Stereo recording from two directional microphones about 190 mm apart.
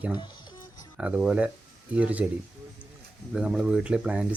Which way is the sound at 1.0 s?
5° right (ahead or behind).